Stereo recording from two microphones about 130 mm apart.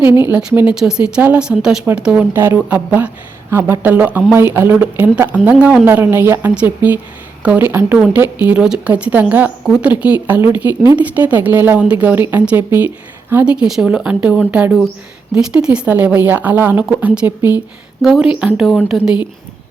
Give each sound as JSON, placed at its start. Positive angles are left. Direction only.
{"t": 0.1, "sound": "speech", "side_deg": -15}
{"t": 2.3, "sound": "speech", "side_deg": -20}
{"t": 7.9, "sound": "speech", "side_deg": -5}
{"t": 18.0, "sound": "speech", "side_deg": -5}